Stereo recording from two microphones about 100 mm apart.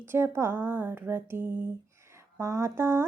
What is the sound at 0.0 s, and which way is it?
Music, 25° right (ahead or behind).